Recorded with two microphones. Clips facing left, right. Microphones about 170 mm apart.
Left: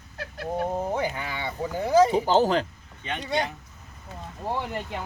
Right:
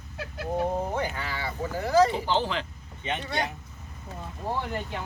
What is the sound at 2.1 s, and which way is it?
Speech, 40° left (ahead or behind).